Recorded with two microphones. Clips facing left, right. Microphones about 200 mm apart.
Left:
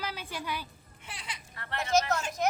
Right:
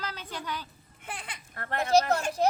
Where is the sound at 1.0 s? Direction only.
55° right (ahead or behind).